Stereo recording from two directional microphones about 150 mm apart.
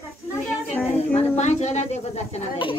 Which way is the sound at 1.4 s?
50° left (ahead or behind).